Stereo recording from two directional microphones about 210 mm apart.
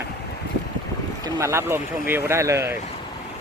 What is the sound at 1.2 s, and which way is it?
Speech, 15° right (ahead or behind).